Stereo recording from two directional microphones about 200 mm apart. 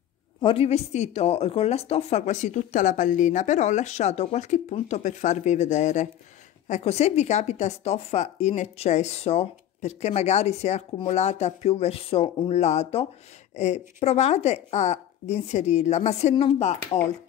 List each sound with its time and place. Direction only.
0.4 s a woman's voice: 30° left (ahead or behind)